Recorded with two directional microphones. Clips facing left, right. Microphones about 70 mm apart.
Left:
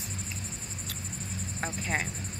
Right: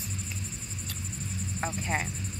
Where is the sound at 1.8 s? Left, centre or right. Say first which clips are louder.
Even; left.